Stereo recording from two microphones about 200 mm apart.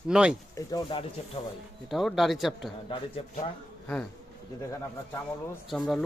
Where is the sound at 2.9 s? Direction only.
25° left (ahead or behind).